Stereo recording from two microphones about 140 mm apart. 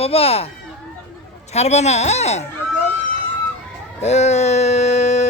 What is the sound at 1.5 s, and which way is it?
Speech, 50° left (ahead or behind).